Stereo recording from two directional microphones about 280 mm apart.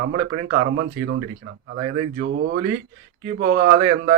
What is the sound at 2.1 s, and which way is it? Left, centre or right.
Speech, right.